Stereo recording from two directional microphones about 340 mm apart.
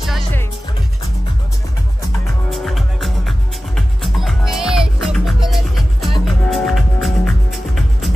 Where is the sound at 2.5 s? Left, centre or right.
Centre.